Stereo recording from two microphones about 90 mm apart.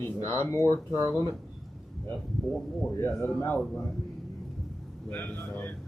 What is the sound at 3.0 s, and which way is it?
Speech, 25° left (ahead or behind).